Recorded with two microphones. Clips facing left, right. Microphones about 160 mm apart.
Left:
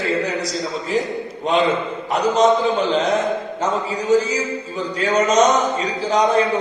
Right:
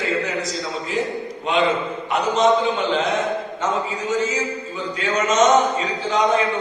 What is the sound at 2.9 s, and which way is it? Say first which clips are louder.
A man's voice: left 2 dB; 35° left (ahead or behind).